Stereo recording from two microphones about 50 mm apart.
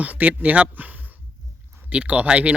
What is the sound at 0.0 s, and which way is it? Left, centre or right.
Speech, right.